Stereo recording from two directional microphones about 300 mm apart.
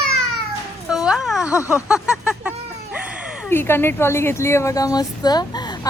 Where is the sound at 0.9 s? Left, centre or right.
Centre.